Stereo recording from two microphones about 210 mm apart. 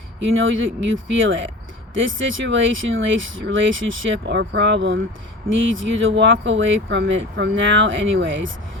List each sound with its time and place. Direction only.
0.2 s speech: 65° right (ahead or behind)